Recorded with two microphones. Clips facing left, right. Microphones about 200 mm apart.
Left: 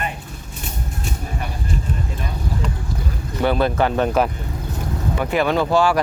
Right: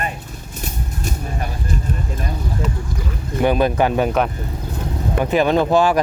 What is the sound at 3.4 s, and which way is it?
Speech, 15° right (ahead or behind).